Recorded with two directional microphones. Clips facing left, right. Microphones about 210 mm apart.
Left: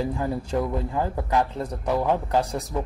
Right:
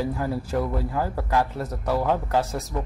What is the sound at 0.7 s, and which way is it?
Speech, 20° left (ahead or behind).